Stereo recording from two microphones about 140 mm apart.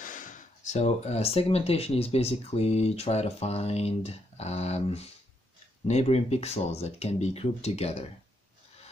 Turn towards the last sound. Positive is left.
turn(degrees=50)  # may be behind; listen again after turning